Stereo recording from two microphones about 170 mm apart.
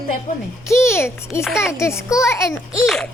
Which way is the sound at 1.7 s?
15° left (ahead or behind).